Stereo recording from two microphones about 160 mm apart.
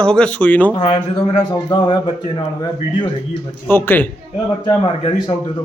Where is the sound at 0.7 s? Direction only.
30° left (ahead or behind).